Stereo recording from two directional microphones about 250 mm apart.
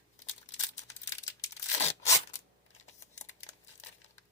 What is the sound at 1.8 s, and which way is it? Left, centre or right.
Tearing, left.